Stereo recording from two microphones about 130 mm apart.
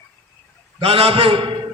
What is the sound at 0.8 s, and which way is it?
Speech, 50° right (ahead or behind).